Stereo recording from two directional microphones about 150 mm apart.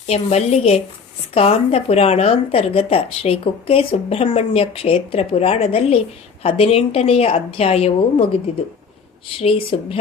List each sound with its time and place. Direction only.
0.1 s a woman's voice: 45° left (ahead or behind)
9.4 s speech: 40° left (ahead or behind)